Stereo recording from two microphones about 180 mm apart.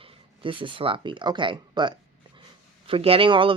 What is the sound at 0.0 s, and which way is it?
Speech, 30° right (ahead or behind).